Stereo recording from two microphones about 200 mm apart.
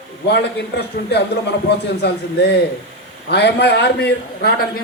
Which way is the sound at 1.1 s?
55° left (ahead or behind).